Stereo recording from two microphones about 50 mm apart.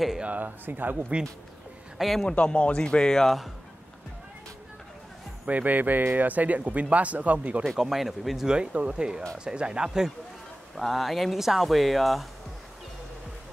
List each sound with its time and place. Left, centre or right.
0.2 s speech: right
2.0 s a man's voice: centre
2.2 s speech: left
5.5 s speech: right
7.6 s speech: centre
8.5 s speech: centre
10.8 s speech: centre